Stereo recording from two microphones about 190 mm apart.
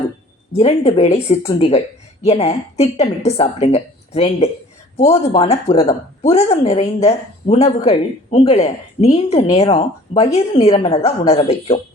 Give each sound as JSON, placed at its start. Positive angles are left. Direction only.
{"t": 0.5, "sound": "a woman's voice", "side_deg": 35}